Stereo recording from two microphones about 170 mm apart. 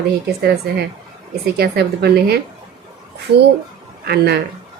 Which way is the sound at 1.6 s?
70° right (ahead or behind).